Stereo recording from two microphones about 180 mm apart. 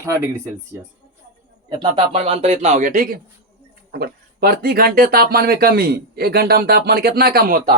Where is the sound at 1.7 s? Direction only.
30° right (ahead or behind); by 3.2 s 50° right (ahead or behind).